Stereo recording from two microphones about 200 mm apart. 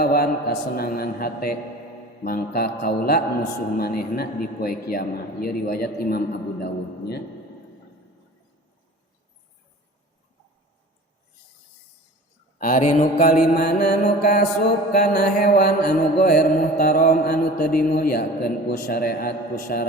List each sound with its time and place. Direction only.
0.0 s mantra: 50° left (ahead or behind)
12.5 s mantra: 40° left (ahead or behind)